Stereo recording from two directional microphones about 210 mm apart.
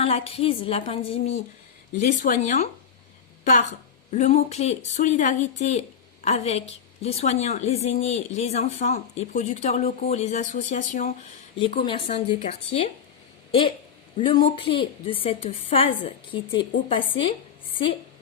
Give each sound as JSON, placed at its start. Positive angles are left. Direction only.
{"t": 0.0, "sound": "a woman's voice", "side_deg": 30}
{"t": 2.0, "sound": "a woman's voice", "side_deg": 40}
{"t": 11.6, "sound": "a woman's voice", "side_deg": 25}